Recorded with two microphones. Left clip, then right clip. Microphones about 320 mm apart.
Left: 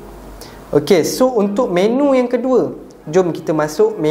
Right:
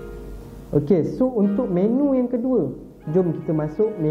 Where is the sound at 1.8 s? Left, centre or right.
Centre.